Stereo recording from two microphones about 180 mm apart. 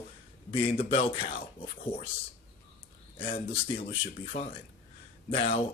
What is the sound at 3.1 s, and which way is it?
Speech, 30° left (ahead or behind).